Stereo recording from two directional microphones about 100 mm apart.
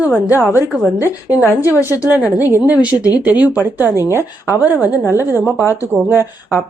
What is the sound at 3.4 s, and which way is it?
Speech, 20° right (ahead or behind).